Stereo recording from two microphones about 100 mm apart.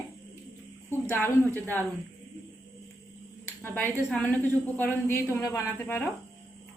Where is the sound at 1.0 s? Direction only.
20° left (ahead or behind).